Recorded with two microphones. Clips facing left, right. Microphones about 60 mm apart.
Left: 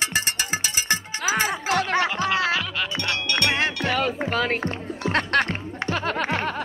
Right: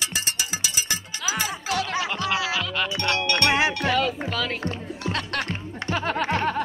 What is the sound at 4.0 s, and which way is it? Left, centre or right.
Music, left.